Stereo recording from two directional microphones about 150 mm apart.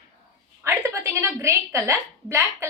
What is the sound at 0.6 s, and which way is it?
A woman's voice, 20° right (ahead or behind).